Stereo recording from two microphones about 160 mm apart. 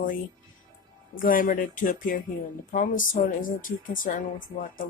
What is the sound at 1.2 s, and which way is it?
Speech, 60° left (ahead or behind).